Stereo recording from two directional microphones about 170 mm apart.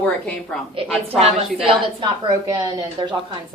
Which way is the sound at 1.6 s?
30° right (ahead or behind).